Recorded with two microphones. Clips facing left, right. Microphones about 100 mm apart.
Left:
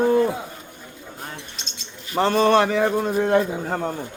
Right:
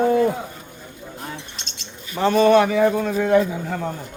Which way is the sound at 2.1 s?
40° left (ahead or behind).